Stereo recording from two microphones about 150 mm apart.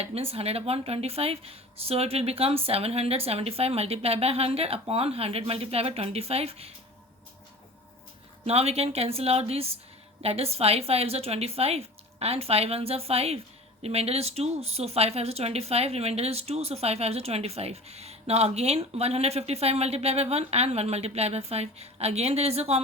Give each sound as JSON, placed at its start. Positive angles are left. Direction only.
{"t": 0.0, "sound": "speech", "side_deg": -40}
{"t": 8.4, "sound": "speech", "side_deg": -45}